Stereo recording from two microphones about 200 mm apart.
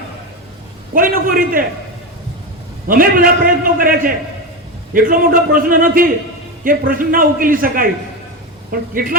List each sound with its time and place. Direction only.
0.9 s a man's voice: 45° right (ahead or behind)
2.8 s a man's voice: 45° right (ahead or behind)